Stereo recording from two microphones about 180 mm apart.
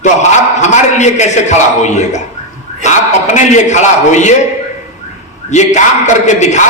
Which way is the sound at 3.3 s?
40° left (ahead or behind).